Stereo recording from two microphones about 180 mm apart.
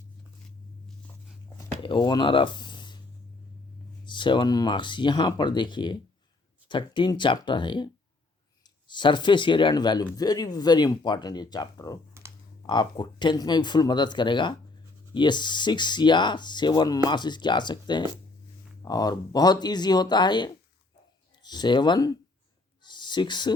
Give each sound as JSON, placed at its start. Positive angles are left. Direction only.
{"t": 1.8, "sound": "speech", "side_deg": 25}
{"t": 4.0, "sound": "speech", "side_deg": 25}
{"t": 12.2, "sound": "computer keyboard", "side_deg": -15}
{"t": 12.6, "sound": "speech", "side_deg": 25}
{"t": 22.8, "sound": "a sound", "side_deg": 25}